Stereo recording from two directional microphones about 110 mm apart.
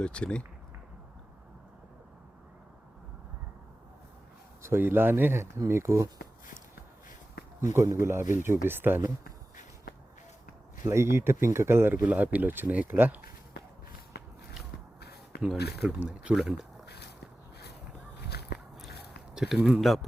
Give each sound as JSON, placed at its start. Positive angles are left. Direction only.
{"t": 0.0, "sound": "speech", "side_deg": 10}
{"t": 4.6, "sound": "speech", "side_deg": -20}
{"t": 7.7, "sound": "speech", "side_deg": -25}
{"t": 10.8, "sound": "speech", "side_deg": -25}
{"t": 15.8, "sound": "speech", "side_deg": -15}
{"t": 19.3, "sound": "speech", "side_deg": -5}